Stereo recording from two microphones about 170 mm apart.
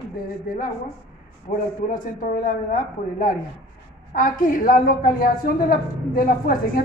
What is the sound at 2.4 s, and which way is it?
A woman's voice, 50° left (ahead or behind).